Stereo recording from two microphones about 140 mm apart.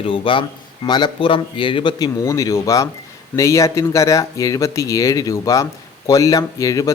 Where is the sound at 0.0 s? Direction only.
40° left (ahead or behind).